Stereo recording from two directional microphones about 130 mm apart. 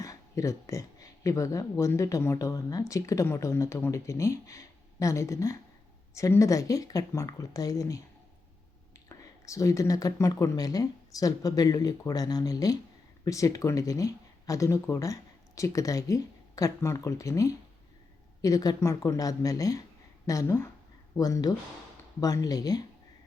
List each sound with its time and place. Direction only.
0.0 s speech: 25° left (ahead or behind)